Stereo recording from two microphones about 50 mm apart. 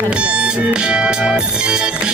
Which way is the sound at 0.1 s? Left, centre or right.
Right.